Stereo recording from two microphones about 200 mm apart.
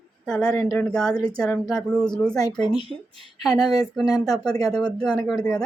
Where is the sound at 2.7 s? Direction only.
25° left (ahead or behind).